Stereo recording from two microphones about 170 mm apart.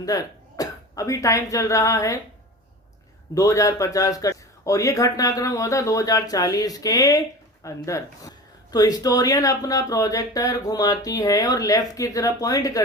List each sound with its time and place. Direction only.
0.0 s speech: 20° left (ahead or behind)
3.3 s speech: 20° left (ahead or behind)